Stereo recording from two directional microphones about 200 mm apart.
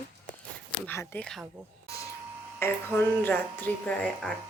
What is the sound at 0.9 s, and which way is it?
Speech, 10° left (ahead or behind).